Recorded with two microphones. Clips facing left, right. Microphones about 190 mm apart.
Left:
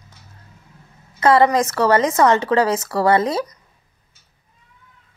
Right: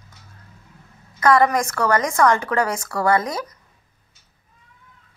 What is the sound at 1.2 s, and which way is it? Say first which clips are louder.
A woman's voice: left 2 dB; 25° left (ahead or behind).